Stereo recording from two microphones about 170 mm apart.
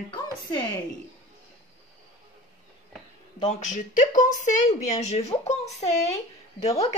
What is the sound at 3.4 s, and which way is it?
A woman's voice, 45° left (ahead or behind).